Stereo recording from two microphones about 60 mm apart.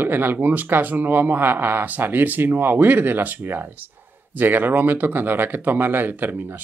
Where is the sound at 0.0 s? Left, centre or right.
Right.